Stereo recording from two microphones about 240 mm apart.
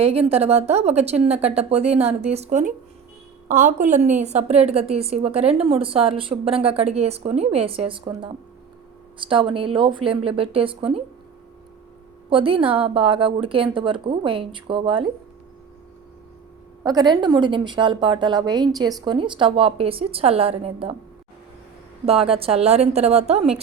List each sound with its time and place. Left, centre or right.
0.0 s a woman's voice: right
12.3 s a woman's voice: right
16.8 s a woman's voice: centre
22.0 s a woman's voice: right